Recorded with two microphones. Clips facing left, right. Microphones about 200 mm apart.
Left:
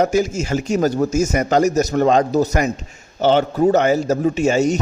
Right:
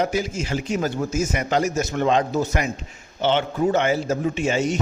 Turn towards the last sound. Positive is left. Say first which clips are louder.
# left 6 dB
turn(degrees=40)  # may be behind; listen again after turning